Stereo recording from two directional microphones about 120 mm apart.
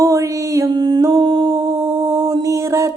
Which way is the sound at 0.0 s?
25° right (ahead or behind).